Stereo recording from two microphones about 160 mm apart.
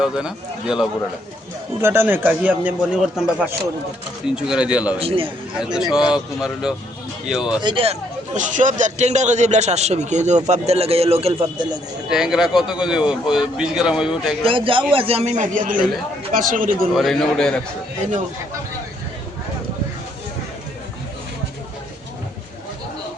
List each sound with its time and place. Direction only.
0.0 s speech: 5° right (ahead or behind)
1.8 s a man's voice: 15° right (ahead or behind)
4.4 s a man's voice: 5° right (ahead or behind)
4.9 s a man's voice: 35° right (ahead or behind)
5.5 s speech: 5° right (ahead or behind)
7.6 s a man's voice: 30° right (ahead or behind)
12.0 s speech: 5° right (ahead or behind)
14.4 s a man's voice: 35° right (ahead or behind); by 16.9 s 60° right (ahead or behind)
16.9 s speech: centre (ahead or behind)